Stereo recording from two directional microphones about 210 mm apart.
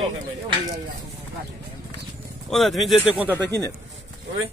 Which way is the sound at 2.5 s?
Centre (ahead or behind).